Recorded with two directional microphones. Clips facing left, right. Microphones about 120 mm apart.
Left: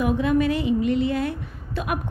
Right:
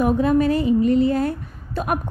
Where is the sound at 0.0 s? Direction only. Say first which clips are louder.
Right 3 dB; 40° right (ahead or behind).